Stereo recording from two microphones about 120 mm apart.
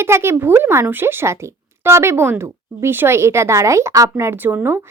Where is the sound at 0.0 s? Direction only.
20° right (ahead or behind).